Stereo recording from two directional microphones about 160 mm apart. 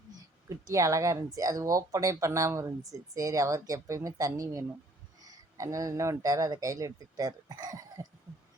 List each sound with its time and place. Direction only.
0.2 s a woman's voice: 20° right (ahead or behind)